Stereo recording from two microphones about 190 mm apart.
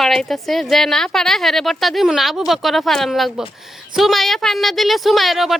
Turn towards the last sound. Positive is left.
turn(degrees=0)  # may be behind; listen again after turning